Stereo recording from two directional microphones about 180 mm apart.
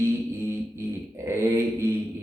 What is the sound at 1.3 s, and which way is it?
Speech, 15° right (ahead or behind).